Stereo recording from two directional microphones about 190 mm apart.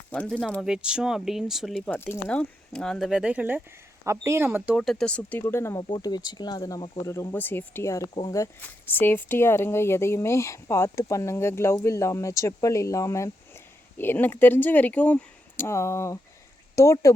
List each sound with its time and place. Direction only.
0.1 s speech: 5° left (ahead or behind)
4.8 s speech: 5° left (ahead or behind)